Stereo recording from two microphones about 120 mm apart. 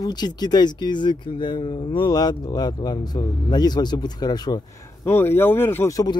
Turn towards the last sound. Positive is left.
turn(degrees=30)  # may be behind; listen again after turning